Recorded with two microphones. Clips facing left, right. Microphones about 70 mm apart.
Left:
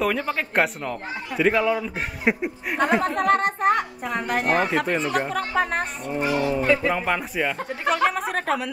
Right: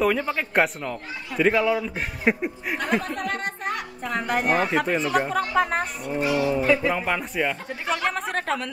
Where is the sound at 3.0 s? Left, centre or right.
Left.